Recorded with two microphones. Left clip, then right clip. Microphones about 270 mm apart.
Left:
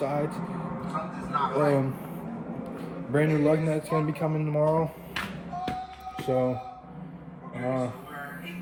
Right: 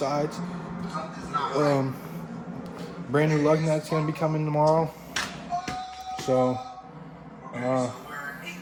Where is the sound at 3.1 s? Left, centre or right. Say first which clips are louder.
Right 2 dB; centre.